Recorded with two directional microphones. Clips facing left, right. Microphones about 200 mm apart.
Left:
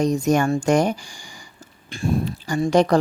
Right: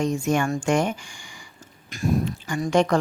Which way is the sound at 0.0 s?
40° left (ahead or behind).